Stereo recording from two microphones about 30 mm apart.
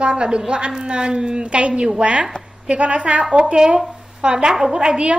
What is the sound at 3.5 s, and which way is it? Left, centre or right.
Speech, right.